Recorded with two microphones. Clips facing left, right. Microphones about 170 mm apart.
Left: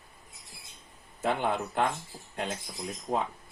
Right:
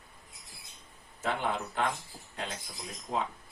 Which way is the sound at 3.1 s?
45° left (ahead or behind).